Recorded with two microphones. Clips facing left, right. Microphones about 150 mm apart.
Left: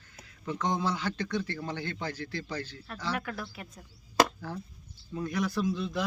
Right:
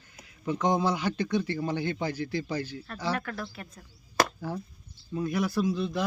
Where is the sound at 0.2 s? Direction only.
10° right (ahead or behind).